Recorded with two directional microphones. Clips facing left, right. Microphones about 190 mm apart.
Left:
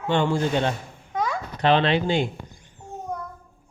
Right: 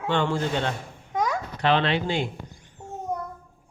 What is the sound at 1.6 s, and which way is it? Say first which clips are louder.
Speech: left 3 dB; 25° left (ahead or behind).